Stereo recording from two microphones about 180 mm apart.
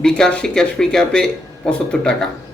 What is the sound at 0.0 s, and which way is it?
A man's voice, 5° left (ahead or behind).